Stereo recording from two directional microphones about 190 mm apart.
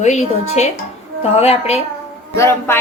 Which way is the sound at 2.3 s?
15° left (ahead or behind).